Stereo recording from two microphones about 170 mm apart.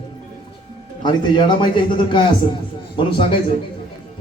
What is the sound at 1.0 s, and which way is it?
A man's voice, 25° left (ahead or behind).